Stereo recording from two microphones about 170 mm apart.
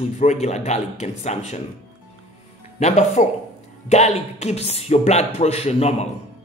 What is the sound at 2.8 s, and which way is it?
Speech, 45° left (ahead or behind).